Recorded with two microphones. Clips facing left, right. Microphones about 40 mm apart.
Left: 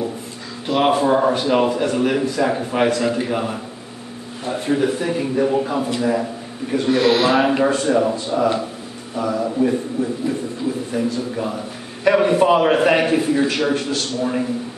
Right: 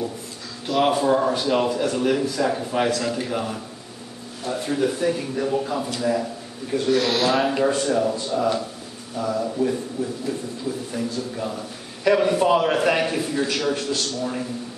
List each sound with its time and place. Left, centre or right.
0.7 s a man's voice: left
10.0 s a sound: left
10.9 s a man's voice: left